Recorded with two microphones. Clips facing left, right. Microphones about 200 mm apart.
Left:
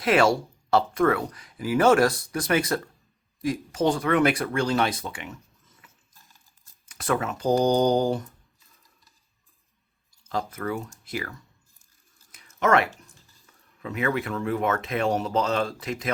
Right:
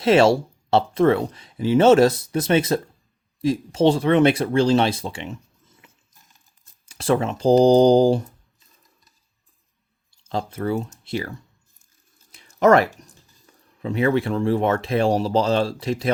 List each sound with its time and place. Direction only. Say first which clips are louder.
0.0 s speech: right 5 dB; 25° right (ahead or behind)
5.8 s a sound: right 2 dB; 20° right (ahead or behind)
6.8 s speech: right 6 dB; 25° right (ahead or behind)
10.2 s speech: right 4 dB; 30° right (ahead or behind)
12.3 s a sound: right 7 dB; 30° right (ahead or behind)
13.0 s speech: right 5 dB; 35° right (ahead or behind)